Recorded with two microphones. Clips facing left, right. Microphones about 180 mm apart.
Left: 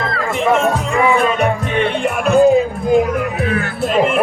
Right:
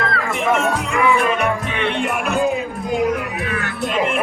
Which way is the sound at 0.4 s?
30° left (ahead or behind).